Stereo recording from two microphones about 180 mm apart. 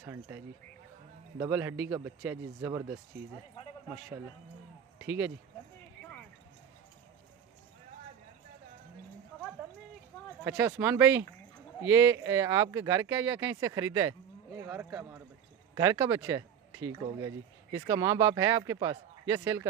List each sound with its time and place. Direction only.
0.0 s a man's voice: 15° right (ahead or behind)
1.4 s a man's voice: 15° right (ahead or behind)
5.0 s speech: 10° right (ahead or behind)
10.4 s a man's voice: 15° right (ahead or behind)